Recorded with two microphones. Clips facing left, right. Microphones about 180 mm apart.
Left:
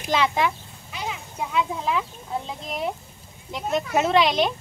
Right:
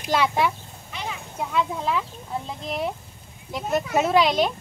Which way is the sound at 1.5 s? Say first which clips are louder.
Even; centre (ahead or behind).